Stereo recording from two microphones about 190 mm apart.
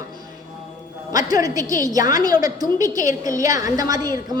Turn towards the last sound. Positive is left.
turn(degrees=-20)  # may be behind; listen again after turning